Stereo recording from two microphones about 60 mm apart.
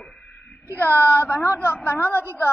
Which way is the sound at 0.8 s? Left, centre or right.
Left.